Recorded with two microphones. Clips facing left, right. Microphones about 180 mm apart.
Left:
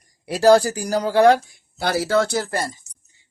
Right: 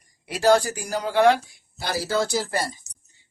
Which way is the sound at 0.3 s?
40° left (ahead or behind).